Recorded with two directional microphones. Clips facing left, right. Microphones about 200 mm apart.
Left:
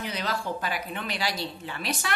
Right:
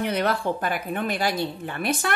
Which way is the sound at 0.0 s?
60° right (ahead or behind).